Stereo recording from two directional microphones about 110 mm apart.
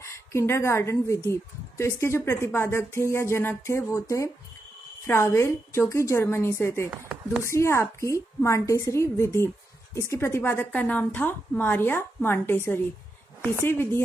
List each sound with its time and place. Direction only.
0.0 s a woman's voice: 25° left (ahead or behind)
6.9 s speech: 10° right (ahead or behind)
7.4 s speech: 25° left (ahead or behind)